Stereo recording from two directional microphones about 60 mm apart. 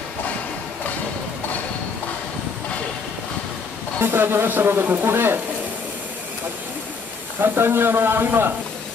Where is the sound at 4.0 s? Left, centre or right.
Right.